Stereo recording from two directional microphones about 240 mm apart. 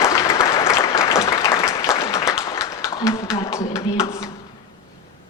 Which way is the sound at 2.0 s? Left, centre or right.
Centre.